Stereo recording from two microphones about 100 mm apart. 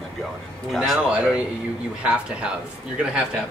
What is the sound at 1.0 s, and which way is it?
Speech, 10° right (ahead or behind).